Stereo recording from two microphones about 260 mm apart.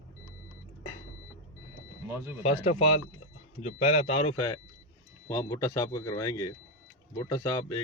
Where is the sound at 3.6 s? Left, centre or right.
Left.